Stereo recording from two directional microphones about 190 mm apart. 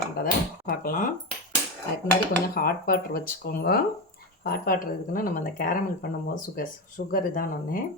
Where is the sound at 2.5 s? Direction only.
50° left (ahead or behind).